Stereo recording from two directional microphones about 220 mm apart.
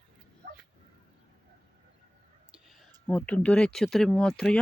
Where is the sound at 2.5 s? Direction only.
Centre (ahead or behind).